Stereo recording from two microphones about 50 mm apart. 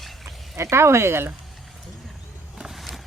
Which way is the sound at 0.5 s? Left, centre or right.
Right.